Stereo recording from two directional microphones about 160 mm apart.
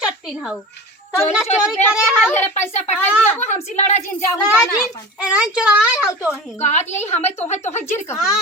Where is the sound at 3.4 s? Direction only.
45° left (ahead or behind).